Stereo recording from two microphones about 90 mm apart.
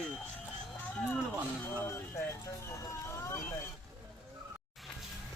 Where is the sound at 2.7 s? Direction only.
30° left (ahead or behind).